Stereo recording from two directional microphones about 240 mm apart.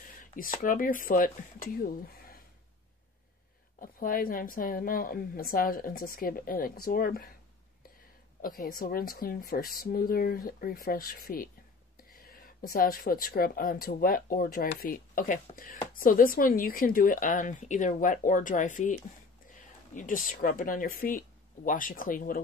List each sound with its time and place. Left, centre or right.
0.2 s a sound: left
0.6 s a woman's voice: left
3.8 s a woman's voice: left
8.4 s a woman's voice: left